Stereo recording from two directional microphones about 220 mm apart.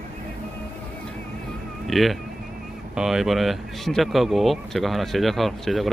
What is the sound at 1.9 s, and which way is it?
Speech, centre (ahead or behind).